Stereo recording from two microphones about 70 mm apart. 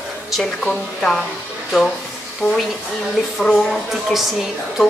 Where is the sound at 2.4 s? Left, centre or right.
Centre.